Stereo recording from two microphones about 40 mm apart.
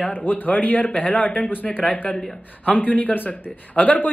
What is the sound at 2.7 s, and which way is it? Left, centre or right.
A woman's voice, left.